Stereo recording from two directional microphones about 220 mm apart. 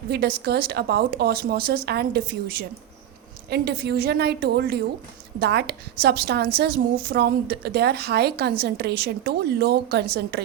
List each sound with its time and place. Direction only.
0.1 s a woman's voice: 45° right (ahead or behind)